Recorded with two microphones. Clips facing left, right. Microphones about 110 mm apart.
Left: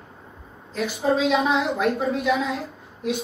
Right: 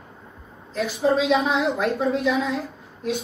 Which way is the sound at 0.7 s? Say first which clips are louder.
Right 1 dB; centre (ahead or behind).